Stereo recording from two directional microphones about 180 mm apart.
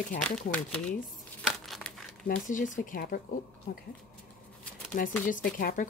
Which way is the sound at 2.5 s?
45° left (ahead or behind).